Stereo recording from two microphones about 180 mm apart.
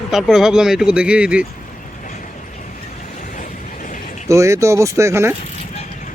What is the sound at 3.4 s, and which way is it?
Vehicle, 45° left (ahead or behind).